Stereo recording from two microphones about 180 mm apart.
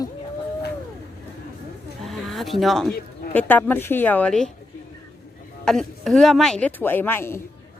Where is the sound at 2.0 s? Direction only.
Centre (ahead or behind).